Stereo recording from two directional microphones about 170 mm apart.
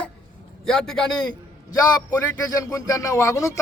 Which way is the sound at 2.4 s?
20° left (ahead or behind).